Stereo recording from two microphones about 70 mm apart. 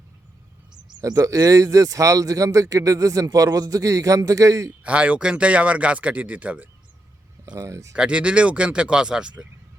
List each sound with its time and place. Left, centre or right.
1.0 s speech: right
4.8 s a man's voice: centre
7.4 s speech: right
7.7 s speech: right
7.9 s speech: centre